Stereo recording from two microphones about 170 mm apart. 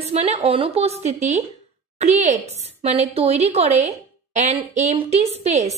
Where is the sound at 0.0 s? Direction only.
40° right (ahead or behind).